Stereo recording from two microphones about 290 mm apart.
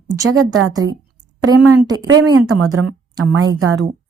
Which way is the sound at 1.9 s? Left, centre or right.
Right.